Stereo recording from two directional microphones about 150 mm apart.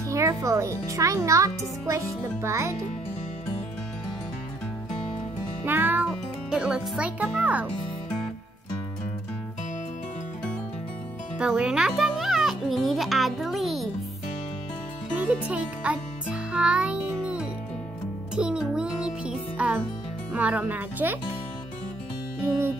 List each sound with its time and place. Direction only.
0.1 s a child's voice: 20° right (ahead or behind)
5.7 s music: 10° right (ahead or behind)
6.0 s a child's voice: 5° right (ahead or behind)
11.3 s music: 5° right (ahead or behind)
12.2 s a child's voice: centre (ahead or behind)
15.1 s music: 10° right (ahead or behind)